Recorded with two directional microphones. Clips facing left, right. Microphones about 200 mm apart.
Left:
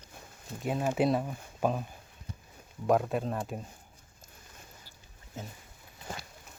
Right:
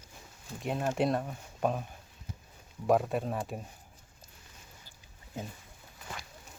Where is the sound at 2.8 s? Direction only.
Centre (ahead or behind).